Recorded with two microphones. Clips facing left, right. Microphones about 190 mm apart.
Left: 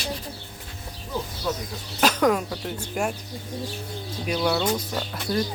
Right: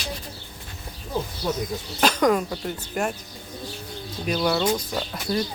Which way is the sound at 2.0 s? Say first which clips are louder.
Right 1 dB; 5° left (ahead or behind).